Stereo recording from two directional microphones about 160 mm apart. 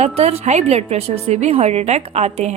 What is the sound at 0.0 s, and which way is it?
A woman's voice, 45° right (ahead or behind).